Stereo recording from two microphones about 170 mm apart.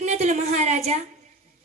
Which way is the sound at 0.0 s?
45° right (ahead or behind).